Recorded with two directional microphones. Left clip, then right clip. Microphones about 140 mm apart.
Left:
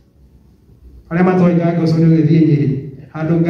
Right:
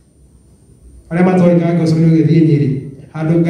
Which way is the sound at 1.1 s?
25° right (ahead or behind).